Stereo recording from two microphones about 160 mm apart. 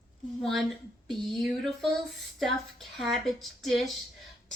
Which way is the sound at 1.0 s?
Centre (ahead or behind).